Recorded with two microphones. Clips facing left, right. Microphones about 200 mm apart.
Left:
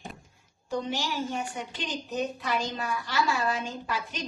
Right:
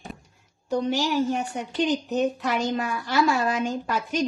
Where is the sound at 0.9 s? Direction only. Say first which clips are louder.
Right 8 dB; 65° right (ahead or behind).